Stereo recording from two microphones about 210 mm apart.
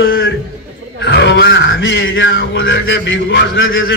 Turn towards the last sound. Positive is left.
turn(degrees=65)  # may be behind; listen again after turning